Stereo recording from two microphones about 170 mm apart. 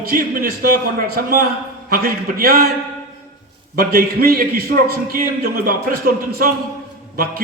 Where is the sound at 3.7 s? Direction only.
60° right (ahead or behind).